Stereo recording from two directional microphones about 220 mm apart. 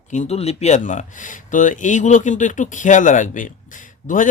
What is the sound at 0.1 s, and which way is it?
Speech, 30° left (ahead or behind).